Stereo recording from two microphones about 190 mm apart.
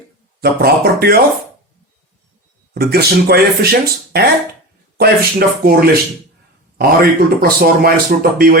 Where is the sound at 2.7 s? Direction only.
55° right (ahead or behind).